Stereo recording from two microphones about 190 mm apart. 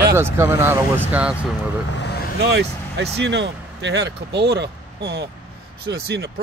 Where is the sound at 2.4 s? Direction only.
65° right (ahead or behind).